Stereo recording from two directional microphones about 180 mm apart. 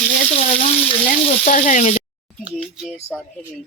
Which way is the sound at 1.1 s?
45° left (ahead or behind).